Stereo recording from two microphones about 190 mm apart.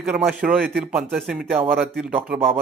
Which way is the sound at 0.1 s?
Centre (ahead or behind).